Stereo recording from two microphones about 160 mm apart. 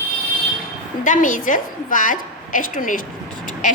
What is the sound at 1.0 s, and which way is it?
A woman's voice, 55° left (ahead or behind).